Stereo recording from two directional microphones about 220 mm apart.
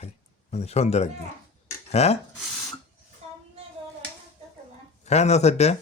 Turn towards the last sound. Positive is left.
turn(degrees=30)  # may be behind; listen again after turning